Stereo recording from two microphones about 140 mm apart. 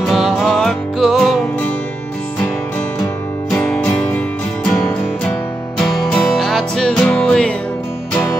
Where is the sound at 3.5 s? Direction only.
5° left (ahead or behind).